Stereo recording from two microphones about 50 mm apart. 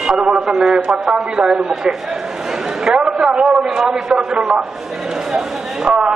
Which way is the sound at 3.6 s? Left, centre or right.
Centre.